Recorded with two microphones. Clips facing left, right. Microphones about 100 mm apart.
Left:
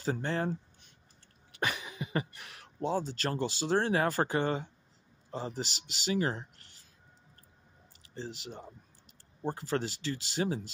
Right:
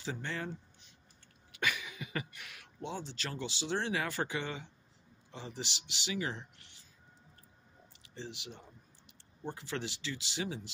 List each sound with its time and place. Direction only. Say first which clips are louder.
0.0 s speech: left 7 dB; 40° left (ahead or behind)
8.1 s speech: left 4 dB; 40° left (ahead or behind)